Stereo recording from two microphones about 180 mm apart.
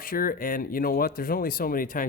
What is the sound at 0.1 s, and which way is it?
Speech, 50° left (ahead or behind).